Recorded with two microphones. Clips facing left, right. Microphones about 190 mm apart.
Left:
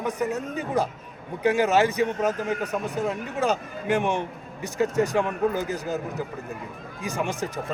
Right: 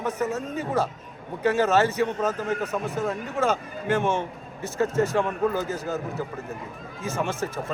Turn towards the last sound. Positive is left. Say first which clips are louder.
# even
turn(degrees=15)  # may be behind; listen again after turning